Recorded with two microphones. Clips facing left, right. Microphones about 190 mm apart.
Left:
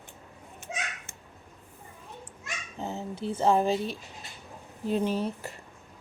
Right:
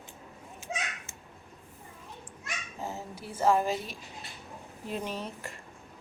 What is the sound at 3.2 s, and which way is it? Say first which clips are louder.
Speech: left 2 dB; 25° left (ahead or behind).